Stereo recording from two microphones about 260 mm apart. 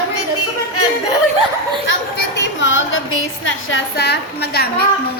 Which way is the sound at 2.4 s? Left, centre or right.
Left.